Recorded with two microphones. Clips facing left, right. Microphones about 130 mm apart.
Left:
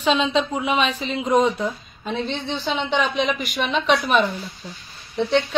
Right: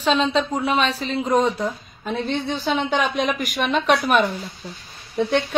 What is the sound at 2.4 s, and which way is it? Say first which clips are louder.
Speech: right 2 dB; 10° right (ahead or behind).